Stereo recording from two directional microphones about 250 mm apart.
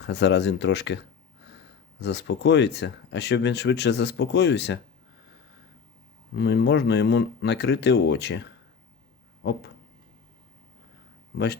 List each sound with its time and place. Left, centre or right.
0.0 s speech: left
6.3 s speech: left
9.4 s a sound: left